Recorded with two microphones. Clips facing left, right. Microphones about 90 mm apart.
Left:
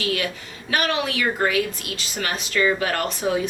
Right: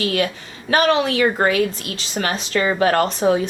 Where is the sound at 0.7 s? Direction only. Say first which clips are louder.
Right 7 dB; 35° right (ahead or behind).